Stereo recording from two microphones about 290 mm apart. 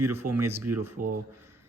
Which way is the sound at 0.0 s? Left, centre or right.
Centre.